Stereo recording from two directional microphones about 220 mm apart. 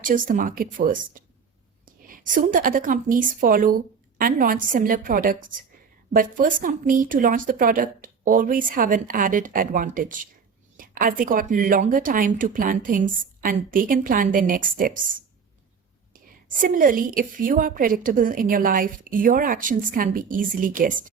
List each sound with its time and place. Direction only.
0.0 s a woman's voice: 40° right (ahead or behind)
16.6 s a woman's voice: 40° right (ahead or behind)